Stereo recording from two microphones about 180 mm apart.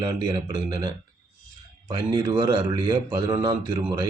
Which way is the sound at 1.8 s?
20° right (ahead or behind).